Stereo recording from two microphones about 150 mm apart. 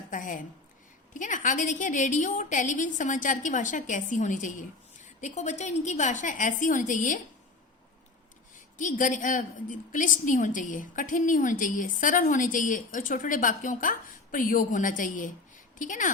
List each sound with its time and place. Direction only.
0.1 s a woman's voice: 60° left (ahead or behind)
8.8 s a woman's voice: 60° left (ahead or behind)